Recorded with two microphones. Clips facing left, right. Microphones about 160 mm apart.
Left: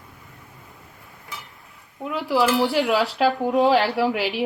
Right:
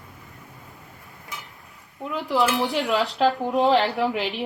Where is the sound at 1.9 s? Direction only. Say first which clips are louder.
Left 2 dB; centre (ahead or behind).